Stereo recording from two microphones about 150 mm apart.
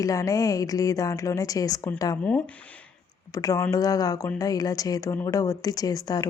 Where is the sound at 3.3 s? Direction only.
20° left (ahead or behind).